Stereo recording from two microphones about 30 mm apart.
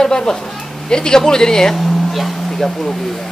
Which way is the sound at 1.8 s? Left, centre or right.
Centre.